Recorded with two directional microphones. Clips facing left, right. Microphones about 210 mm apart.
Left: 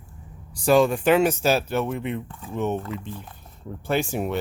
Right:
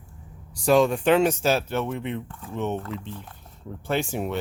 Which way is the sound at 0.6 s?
5° left (ahead or behind).